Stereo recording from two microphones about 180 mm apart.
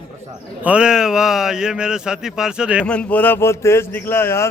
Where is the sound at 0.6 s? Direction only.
5° right (ahead or behind).